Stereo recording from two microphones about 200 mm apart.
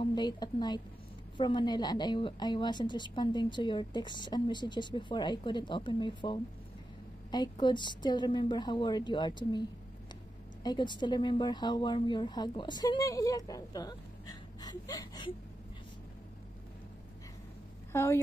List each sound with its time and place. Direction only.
0.0 s a woman's voice: 20° left (ahead or behind)
17.9 s a woman's voice: 15° left (ahead or behind)